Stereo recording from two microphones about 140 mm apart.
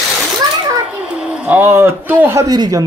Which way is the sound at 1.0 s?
5° right (ahead or behind).